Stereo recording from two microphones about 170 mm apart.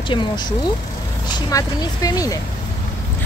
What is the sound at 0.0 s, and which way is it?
Speech, 30° left (ahead or behind).